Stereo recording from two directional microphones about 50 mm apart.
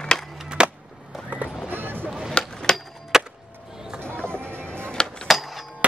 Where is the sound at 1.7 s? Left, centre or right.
Right.